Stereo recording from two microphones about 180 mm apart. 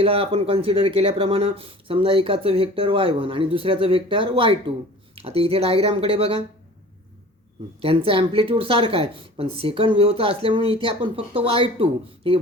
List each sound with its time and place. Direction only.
0.0 s speech: 30° right (ahead or behind)
7.8 s speech: 30° right (ahead or behind)